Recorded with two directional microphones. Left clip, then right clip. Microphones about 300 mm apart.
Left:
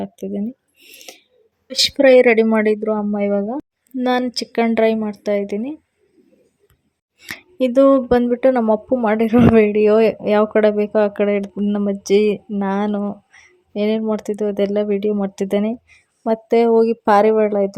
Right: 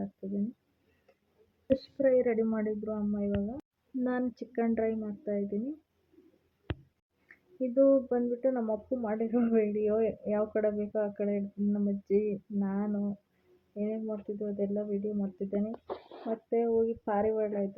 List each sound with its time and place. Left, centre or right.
1.6 s speech: left
7.7 s speech: left
16.5 s speech: left